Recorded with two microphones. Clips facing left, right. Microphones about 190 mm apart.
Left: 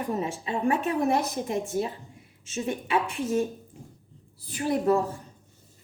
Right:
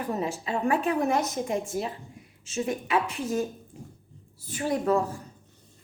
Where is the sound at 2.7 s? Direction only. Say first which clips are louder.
Even; 30° left (ahead or behind).